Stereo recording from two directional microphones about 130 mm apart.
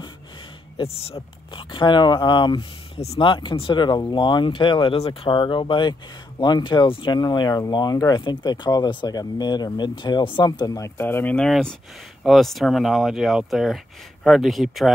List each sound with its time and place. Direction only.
0.7 s speech: 50° left (ahead or behind)
1.1 s speech: 40° left (ahead or behind)
3.0 s speech: 45° left (ahead or behind); by 10.9 s 30° left (ahead or behind)
11.0 s speech: 15° left (ahead or behind); by 14.9 s centre (ahead or behind)